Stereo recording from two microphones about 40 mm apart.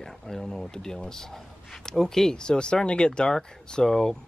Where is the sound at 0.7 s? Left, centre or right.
Centre.